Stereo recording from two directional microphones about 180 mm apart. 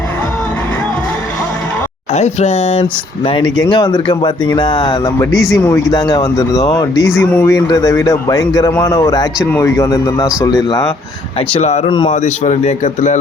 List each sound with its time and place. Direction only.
2.1 s a man's voice: 35° left (ahead or behind)
3.2 s speech: 25° left (ahead or behind)
11.5 s a man's voice: 40° left (ahead or behind)
11.9 s speech: 25° left (ahead or behind)
12.1 s a man's voice: 40° left (ahead or behind)